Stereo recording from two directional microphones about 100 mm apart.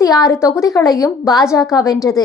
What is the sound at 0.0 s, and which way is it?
Speech, 35° left (ahead or behind).